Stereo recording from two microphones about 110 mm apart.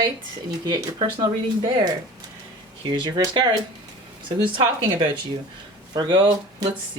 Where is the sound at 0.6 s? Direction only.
40° right (ahead or behind).